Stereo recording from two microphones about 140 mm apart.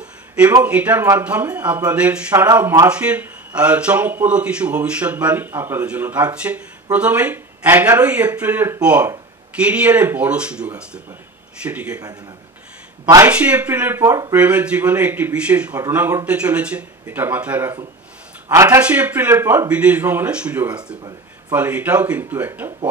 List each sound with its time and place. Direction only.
0.7 s a man's voice: 10° right (ahead or behind)
13.3 s a man's voice: 10° right (ahead or behind)
18.8 s a man's voice: 10° right (ahead or behind)